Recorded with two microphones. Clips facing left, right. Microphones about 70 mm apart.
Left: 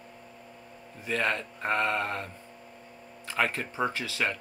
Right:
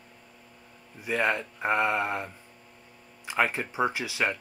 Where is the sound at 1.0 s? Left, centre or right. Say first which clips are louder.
Right 2 dB; centre.